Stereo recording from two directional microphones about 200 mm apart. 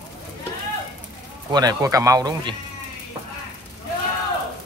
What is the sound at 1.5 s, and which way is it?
Speech, 20° right (ahead or behind).